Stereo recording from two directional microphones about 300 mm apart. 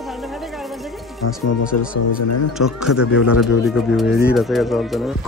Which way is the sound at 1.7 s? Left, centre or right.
Left.